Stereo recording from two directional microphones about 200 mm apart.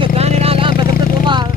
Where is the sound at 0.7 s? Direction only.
50° left (ahead or behind).